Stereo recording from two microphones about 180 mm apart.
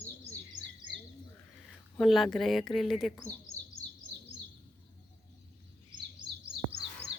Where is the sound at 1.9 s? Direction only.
Centre (ahead or behind).